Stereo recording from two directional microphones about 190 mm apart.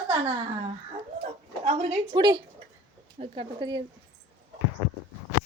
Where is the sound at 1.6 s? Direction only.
35° right (ahead or behind).